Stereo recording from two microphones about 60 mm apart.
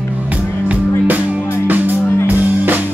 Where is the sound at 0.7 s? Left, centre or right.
Right.